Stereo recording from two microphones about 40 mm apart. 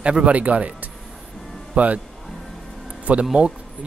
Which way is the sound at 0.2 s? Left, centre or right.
Right.